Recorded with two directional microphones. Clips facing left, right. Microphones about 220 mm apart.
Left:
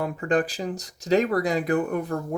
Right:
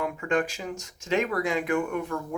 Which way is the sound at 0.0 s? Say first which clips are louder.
Left 3 dB; 35° left (ahead or behind).